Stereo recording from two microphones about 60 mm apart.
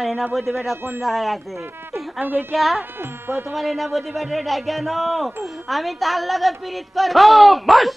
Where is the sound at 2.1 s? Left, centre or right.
Right.